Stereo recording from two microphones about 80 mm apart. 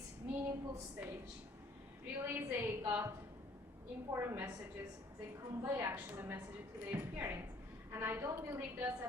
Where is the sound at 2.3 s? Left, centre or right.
Right.